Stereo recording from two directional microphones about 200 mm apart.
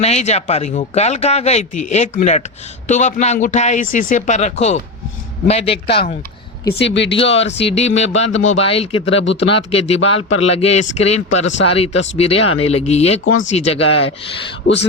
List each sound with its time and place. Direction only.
0.0 s speech: 35° left (ahead or behind)
6.7 s speech: 60° left (ahead or behind)
7.2 s speech: 30° left (ahead or behind)
9.0 s speech: 70° left (ahead or behind)
9.7 s speech: 30° left (ahead or behind)
14.6 s speech: 60° left (ahead or behind)